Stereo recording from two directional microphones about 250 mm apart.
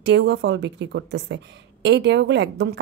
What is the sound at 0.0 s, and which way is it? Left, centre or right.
A woman's voice, right.